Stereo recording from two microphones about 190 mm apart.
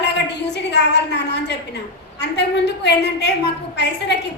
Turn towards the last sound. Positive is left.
turn(degrees=65)  # may be behind; listen again after turning